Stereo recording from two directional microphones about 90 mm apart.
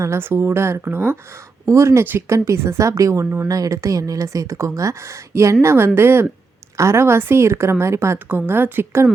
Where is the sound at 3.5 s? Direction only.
40° right (ahead or behind).